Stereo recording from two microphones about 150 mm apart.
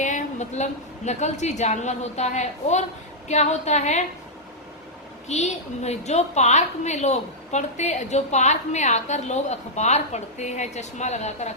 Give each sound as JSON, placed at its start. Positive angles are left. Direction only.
{"t": 0.0, "sound": "a woman's voice", "side_deg": 55}
{"t": 5.3, "sound": "a woman's voice", "side_deg": 45}